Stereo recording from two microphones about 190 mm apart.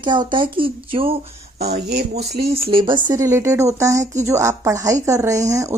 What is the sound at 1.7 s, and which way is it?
Speech, 55° right (ahead or behind).